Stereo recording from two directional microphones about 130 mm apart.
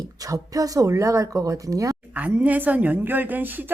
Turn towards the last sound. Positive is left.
turn(degrees=-15)  # may be behind; listen again after turning